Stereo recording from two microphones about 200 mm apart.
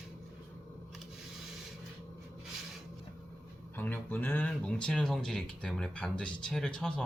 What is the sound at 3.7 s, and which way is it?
Speech, 10° left (ahead or behind).